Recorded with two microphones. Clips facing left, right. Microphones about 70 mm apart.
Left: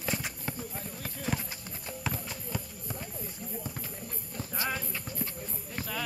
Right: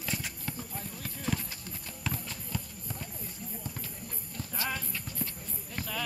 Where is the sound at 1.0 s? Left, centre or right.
Centre.